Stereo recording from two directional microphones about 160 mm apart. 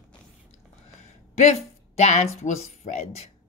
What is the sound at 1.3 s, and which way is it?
Speech, 45° left (ahead or behind).